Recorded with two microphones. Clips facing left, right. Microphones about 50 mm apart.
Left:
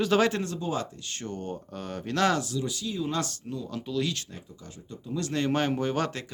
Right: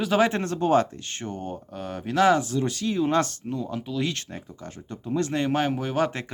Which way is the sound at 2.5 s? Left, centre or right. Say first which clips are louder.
Right 6 dB; right.